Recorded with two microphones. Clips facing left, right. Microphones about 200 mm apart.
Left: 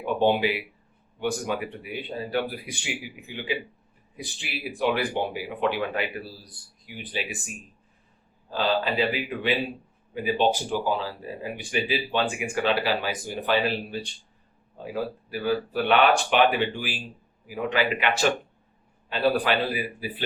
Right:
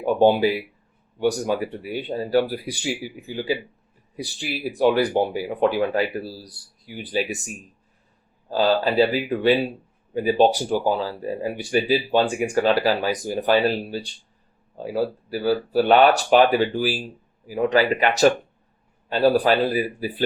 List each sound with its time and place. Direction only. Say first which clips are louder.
0.0 s speech: right 5 dB; 40° right (ahead or behind)